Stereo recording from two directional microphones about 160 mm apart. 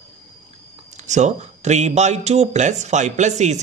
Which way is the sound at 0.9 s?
45° right (ahead or behind).